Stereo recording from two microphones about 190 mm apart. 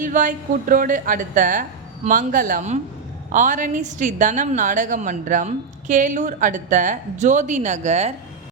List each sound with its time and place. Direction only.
0.0 s a woman's voice: 45° right (ahead or behind)